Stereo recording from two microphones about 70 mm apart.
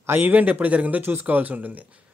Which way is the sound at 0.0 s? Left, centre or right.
Right.